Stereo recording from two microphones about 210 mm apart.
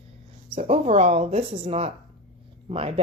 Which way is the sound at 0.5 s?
30° right (ahead or behind).